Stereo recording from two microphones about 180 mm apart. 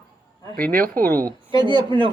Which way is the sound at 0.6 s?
50° right (ahead or behind).